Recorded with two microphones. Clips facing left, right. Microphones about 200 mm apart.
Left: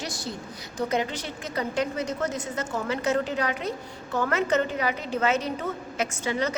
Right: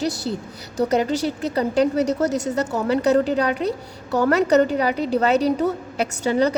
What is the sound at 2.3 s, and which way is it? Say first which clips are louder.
Speech: right 9 dB; 75° right (ahead or behind).